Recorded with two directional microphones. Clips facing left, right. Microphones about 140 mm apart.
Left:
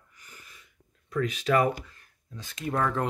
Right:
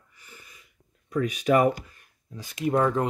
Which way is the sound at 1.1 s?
15° right (ahead or behind).